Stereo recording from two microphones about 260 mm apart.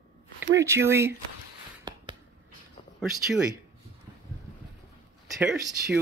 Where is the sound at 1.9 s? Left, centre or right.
Centre.